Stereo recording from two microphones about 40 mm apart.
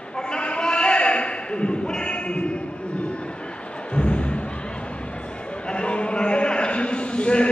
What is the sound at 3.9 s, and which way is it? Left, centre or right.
Music, left.